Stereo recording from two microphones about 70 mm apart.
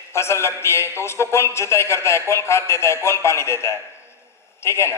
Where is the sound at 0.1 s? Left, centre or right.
Left.